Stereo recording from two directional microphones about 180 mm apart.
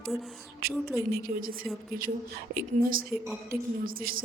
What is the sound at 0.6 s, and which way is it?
Speech, 60° right (ahead or behind).